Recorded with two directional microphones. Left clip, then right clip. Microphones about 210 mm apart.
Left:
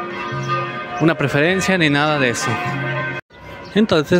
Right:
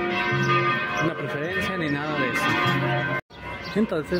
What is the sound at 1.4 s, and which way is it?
Speech, 40° left (ahead or behind).